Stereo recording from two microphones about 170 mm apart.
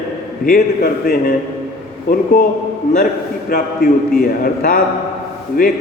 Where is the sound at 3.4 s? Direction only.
60° left (ahead or behind).